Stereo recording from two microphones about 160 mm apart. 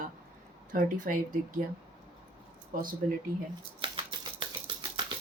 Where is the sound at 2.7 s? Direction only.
60° right (ahead or behind).